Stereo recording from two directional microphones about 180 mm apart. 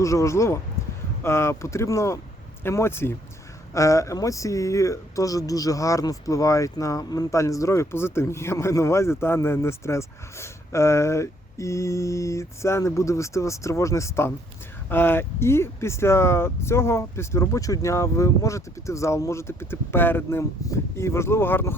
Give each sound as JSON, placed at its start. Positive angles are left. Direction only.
{"t": 0.0, "sound": "speech", "side_deg": 15}